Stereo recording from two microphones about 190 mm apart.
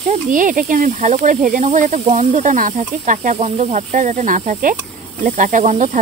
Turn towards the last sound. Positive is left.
turn(degrees=-40)  # may be behind; listen again after turning